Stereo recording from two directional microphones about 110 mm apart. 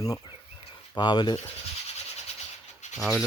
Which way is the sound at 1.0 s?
45° left (ahead or behind).